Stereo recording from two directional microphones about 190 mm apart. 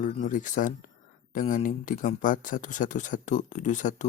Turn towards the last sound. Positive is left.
turn(degrees=40)  # may be behind; listen again after turning